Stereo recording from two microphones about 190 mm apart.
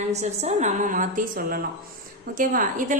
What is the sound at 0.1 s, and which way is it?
A woman's voice, 35° right (ahead or behind).